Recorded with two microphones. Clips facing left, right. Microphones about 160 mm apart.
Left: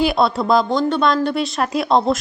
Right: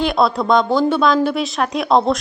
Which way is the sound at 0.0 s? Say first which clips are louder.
Even; centre (ahead or behind).